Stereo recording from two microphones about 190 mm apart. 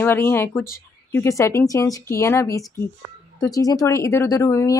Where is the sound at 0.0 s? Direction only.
10° left (ahead or behind).